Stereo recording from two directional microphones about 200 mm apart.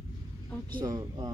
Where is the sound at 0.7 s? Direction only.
20° right (ahead or behind).